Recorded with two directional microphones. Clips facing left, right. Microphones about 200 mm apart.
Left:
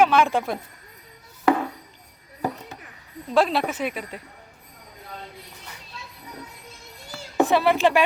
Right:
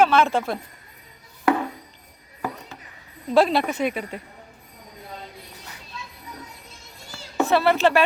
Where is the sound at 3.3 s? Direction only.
Centre (ahead or behind).